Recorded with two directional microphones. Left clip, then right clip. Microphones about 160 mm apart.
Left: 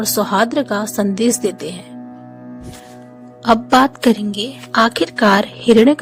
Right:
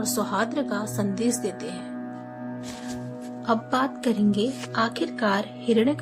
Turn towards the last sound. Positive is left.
turn(degrees=85)